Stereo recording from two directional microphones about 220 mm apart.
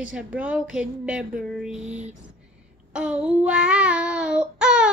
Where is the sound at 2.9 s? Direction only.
5° right (ahead or behind).